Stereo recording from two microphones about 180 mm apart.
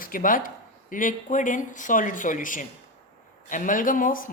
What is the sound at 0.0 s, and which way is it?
Speech, 50° left (ahead or behind).